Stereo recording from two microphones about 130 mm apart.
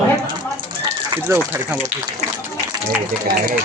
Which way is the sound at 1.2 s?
20° right (ahead or behind).